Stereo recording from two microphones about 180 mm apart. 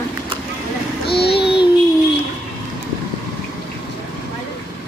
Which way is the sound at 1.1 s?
65° left (ahead or behind).